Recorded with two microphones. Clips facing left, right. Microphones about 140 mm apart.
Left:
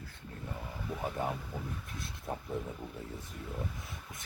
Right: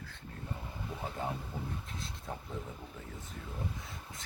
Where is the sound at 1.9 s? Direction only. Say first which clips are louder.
Even; 25° right (ahead or behind).